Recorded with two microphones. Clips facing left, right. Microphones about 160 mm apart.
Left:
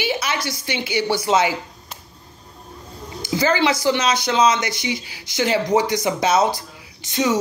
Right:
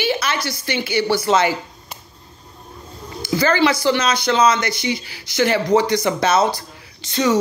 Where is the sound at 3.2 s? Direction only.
15° left (ahead or behind).